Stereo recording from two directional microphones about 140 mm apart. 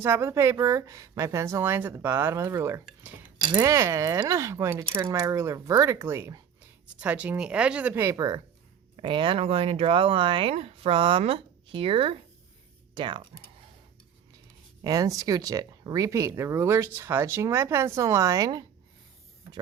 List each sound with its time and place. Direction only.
0.0 s speech: 20° right (ahead or behind); by 13.2 s 35° right (ahead or behind)
14.8 s speech: 25° right (ahead or behind)